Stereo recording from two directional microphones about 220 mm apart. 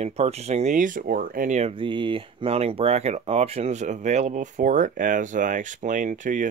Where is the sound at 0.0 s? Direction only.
30° right (ahead or behind).